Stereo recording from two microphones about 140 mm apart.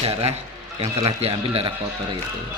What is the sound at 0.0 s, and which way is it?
A man's voice, 45° right (ahead or behind).